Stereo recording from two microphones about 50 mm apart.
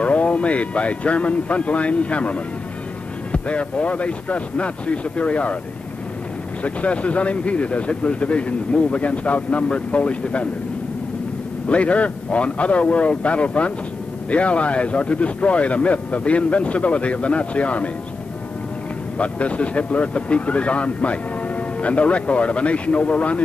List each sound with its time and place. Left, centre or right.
0.0 s speech: left
6.6 s speech: left
11.7 s speech: left
19.1 s speech: left